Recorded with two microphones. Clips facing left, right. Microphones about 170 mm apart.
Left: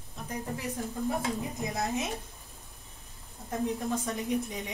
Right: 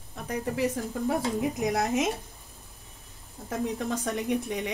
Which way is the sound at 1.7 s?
80° right.